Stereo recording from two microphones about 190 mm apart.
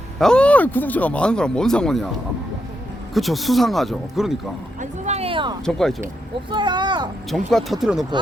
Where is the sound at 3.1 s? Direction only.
Centre (ahead or behind).